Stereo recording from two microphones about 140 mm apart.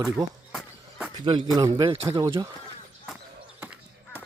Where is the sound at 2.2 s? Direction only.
25° right (ahead or behind).